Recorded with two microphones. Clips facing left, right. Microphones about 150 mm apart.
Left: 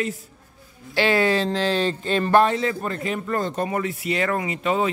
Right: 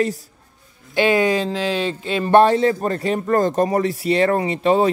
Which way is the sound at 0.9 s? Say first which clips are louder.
Right 3 dB; 15° right (ahead or behind).